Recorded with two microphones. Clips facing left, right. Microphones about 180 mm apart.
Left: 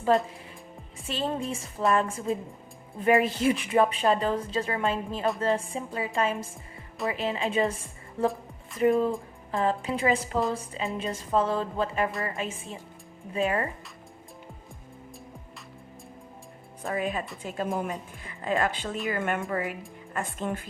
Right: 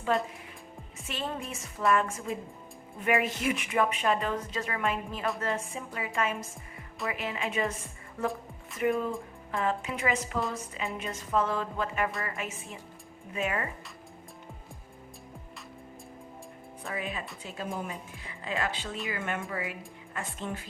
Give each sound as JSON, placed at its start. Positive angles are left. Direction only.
{"t": 1.0, "sound": "a woman's voice", "side_deg": 30}
{"t": 16.8, "sound": "a woman's voice", "side_deg": 40}